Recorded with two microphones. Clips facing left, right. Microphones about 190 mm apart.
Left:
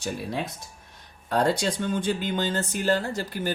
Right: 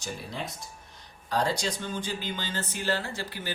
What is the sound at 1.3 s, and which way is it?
Speech, 55° left (ahead or behind).